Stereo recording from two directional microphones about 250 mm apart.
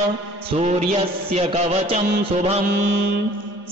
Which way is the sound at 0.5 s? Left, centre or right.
Right.